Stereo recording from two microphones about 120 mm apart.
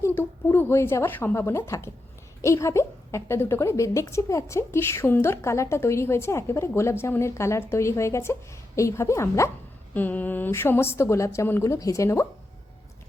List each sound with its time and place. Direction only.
0.0 s a woman's voice: 20° left (ahead or behind)
9.9 s a woman's voice: 15° left (ahead or behind)